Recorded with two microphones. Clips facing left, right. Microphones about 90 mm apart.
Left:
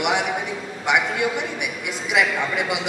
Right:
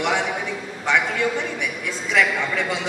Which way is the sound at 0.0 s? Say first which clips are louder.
Even; 15° left (ahead or behind).